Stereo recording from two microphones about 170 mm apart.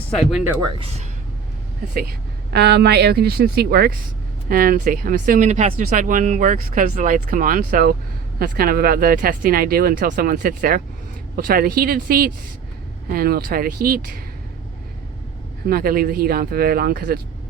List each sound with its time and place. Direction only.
0.1 s speech: centre (ahead or behind)
0.8 s speech: 35° right (ahead or behind)
2.5 s a woman's voice: 75° right (ahead or behind); by 14.2 s 55° right (ahead or behind)
15.6 s speech: 60° right (ahead or behind)